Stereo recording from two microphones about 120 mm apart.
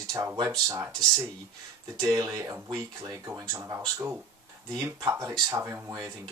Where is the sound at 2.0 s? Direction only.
30° right (ahead or behind).